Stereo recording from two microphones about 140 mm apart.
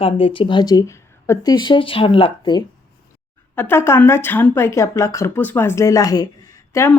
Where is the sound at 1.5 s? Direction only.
35° left (ahead or behind).